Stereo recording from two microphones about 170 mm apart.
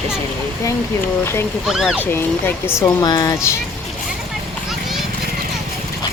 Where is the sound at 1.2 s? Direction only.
15° left (ahead or behind).